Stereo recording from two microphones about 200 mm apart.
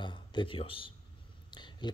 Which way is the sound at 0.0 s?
25° left (ahead or behind).